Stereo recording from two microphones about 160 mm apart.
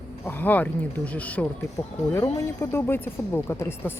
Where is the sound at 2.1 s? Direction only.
20° left (ahead or behind).